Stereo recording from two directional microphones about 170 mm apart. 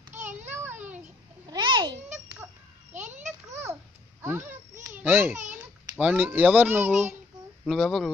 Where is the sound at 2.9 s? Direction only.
45° right (ahead or behind).